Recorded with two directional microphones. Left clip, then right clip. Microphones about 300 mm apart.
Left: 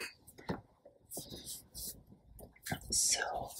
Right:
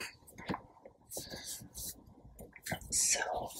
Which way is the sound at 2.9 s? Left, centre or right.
Centre.